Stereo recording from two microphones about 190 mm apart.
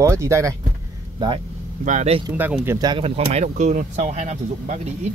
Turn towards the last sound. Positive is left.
turn(degrees=-35)  # may be behind; listen again after turning